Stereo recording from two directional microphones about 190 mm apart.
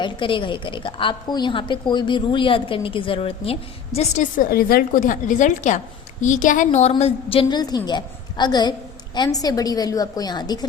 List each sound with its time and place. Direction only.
0.0 s a woman's voice: 25° left (ahead or behind)